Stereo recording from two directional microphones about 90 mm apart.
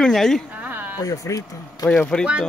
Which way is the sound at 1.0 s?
40° left (ahead or behind).